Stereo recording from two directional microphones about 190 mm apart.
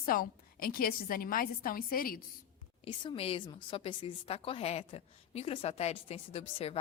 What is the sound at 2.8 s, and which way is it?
A woman's voice, 25° left (ahead or behind).